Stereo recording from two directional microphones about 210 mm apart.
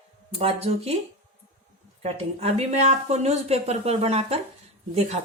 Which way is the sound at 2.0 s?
30° right (ahead or behind).